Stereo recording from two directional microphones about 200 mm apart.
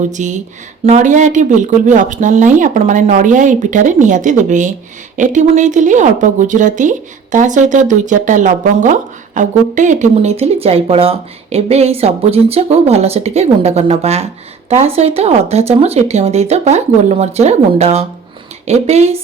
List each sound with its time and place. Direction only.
0.1 s a woman's voice: 35° right (ahead or behind)